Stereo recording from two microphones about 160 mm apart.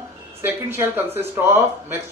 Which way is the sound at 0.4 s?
15° right (ahead or behind).